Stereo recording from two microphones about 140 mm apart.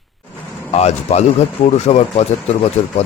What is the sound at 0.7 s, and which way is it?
Speech, 50° left (ahead or behind).